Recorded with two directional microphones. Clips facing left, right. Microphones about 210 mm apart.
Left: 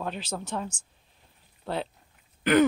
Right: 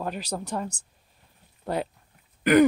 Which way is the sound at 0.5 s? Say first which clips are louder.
Right 2 dB; 5° right (ahead or behind).